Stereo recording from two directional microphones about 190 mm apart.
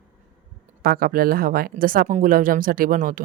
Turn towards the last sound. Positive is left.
turn(degrees=-45)  # may be behind; listen again after turning